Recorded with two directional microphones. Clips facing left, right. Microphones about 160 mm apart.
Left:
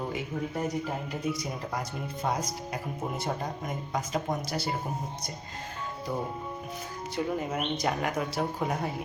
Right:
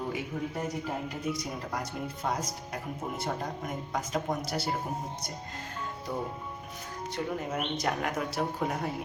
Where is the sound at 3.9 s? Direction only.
Centre (ahead or behind).